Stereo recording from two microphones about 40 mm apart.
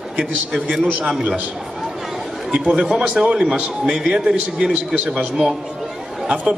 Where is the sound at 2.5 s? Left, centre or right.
Right.